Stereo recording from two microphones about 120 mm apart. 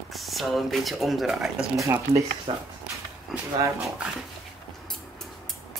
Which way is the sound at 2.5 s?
50° right (ahead or behind).